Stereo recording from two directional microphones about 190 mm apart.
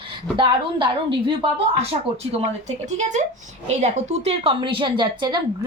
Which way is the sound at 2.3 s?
40° right (ahead or behind).